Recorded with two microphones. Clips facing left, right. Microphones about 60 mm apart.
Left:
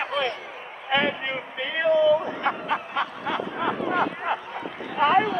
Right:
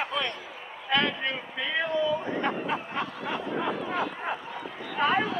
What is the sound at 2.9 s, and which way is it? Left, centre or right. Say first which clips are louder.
Snicker: left 4 dB; left.